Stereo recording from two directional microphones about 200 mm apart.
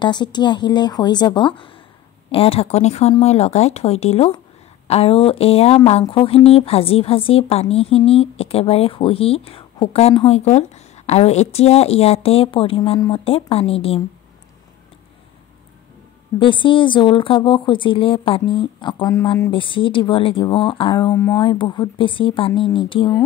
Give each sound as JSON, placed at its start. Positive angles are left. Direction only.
{"t": 0.0, "sound": "a woman's voice", "side_deg": 20}
{"t": 16.3, "sound": "speech", "side_deg": 25}